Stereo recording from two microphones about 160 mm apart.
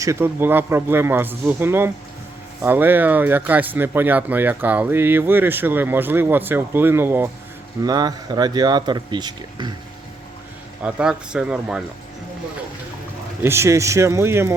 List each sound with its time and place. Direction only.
0.0 s speech: 15° right (ahead or behind)
7.8 s speech: 25° right (ahead or behind)
10.8 s speech: 5° right (ahead or behind)
13.4 s speech: 15° right (ahead or behind)